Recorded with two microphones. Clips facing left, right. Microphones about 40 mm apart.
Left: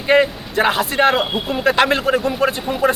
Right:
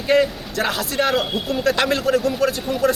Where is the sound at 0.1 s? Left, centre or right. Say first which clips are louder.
Left 3 dB; left.